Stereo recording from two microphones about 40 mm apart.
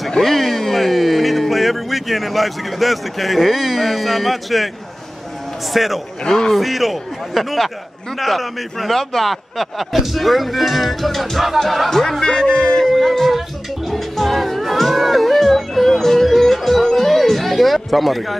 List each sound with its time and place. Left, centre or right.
0.2 s speech: centre
5.7 s a man's voice: centre
6.2 s speech: centre
6.5 s a man's voice: centre
12.3 s speech: left
12.8 s speech: centre
13.8 s music: centre